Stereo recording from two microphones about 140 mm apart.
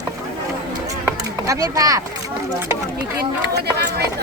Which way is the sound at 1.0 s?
25° right (ahead or behind).